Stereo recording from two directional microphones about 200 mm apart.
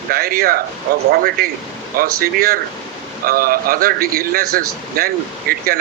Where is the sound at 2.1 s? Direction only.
50° right (ahead or behind).